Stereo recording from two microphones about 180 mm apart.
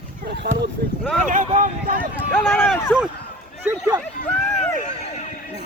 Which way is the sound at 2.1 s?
10° left (ahead or behind).